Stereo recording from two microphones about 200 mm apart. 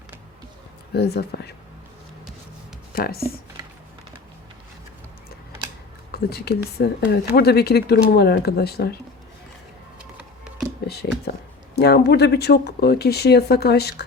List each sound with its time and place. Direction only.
0.9 s speech: 55° left (ahead or behind)
2.9 s speech: 50° left (ahead or behind)
6.1 s speech: 50° left (ahead or behind)
10.2 s a sound: 5° right (ahead or behind)
11.8 s speech: 55° left (ahead or behind)